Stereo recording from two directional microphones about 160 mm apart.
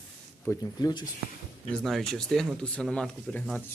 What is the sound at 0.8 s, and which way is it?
Speech, 25° left (ahead or behind).